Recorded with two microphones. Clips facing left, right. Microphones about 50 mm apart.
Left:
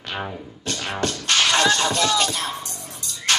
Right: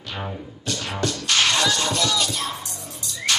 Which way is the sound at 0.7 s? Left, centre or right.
Left.